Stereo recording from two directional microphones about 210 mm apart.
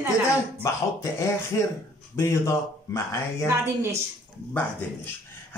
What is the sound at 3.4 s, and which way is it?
Speech, 15° right (ahead or behind).